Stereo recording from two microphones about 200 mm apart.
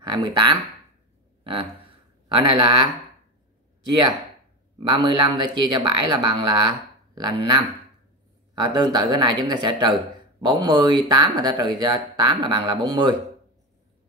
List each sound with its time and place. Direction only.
0.0 s speech: 20° right (ahead or behind)
4.8 s speech: 25° right (ahead or behind)